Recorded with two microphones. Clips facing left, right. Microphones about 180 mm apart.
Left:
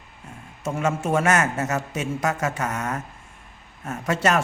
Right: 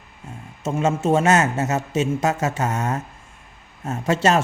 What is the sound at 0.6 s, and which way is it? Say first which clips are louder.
A woman's voice: right 4 dB; 25° right (ahead or behind).